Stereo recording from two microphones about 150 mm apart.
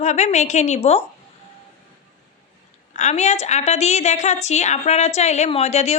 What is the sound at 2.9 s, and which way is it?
A woman's voice, 50° left (ahead or behind).